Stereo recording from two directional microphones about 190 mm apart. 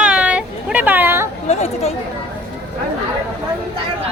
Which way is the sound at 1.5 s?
35° left (ahead or behind).